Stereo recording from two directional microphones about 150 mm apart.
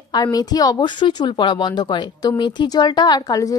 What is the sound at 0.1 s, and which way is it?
A woman's voice, 25° left (ahead or behind).